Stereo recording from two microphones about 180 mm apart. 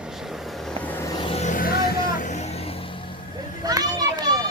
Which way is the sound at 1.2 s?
35° left (ahead or behind).